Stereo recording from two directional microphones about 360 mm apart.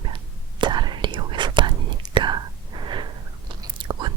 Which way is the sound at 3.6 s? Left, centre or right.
Centre.